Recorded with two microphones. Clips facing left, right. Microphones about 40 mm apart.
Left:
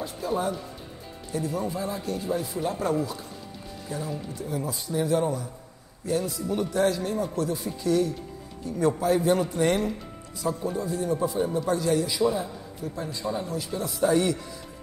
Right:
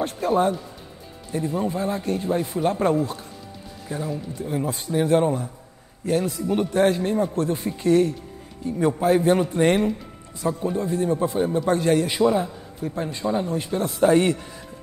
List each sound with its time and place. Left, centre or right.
0.3 s a man's voice: right
8.6 s a man's voice: right
9.0 s a man's voice: right